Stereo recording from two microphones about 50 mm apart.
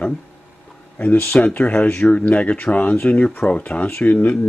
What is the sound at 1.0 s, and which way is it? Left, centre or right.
A man's voice, left.